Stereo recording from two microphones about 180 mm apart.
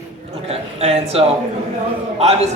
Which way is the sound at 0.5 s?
35° right (ahead or behind).